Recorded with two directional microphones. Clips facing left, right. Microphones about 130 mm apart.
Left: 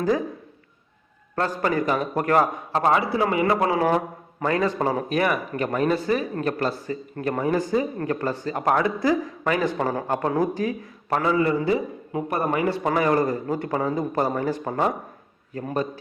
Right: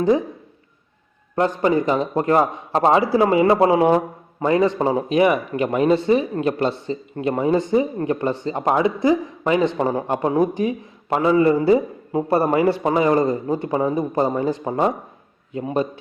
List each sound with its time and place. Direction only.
0.0 s speech: 25° right (ahead or behind)
1.4 s a man's voice: 20° right (ahead or behind)